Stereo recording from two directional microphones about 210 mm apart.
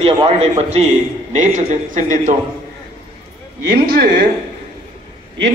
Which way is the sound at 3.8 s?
50° right (ahead or behind).